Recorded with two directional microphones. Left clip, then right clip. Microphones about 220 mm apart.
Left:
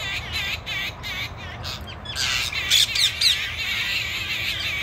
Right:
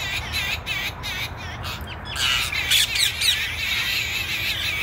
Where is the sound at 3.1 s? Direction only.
25° right (ahead or behind).